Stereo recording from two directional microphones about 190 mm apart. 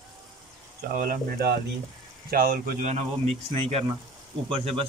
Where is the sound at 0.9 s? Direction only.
50° right (ahead or behind).